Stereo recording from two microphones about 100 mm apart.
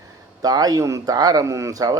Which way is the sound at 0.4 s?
40° right (ahead or behind).